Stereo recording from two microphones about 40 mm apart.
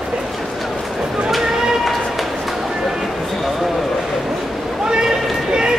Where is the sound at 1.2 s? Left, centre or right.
Centre.